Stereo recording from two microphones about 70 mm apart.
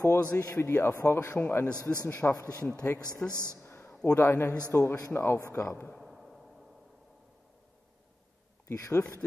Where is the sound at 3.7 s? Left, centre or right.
Left.